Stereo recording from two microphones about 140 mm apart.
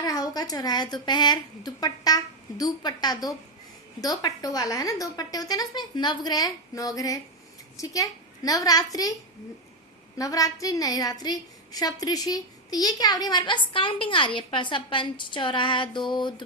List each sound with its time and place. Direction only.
0.0 s a woman's voice: 25° left (ahead or behind)
10.2 s a woman's voice: 25° left (ahead or behind)